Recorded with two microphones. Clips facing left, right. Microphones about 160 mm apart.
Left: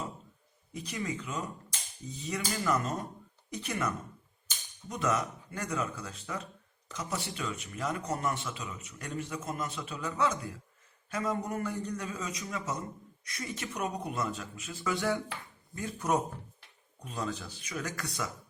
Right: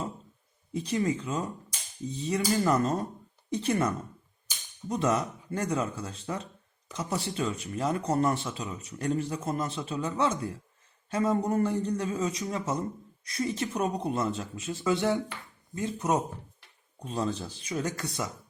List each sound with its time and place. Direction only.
0.7 s a man's voice: 30° right (ahead or behind)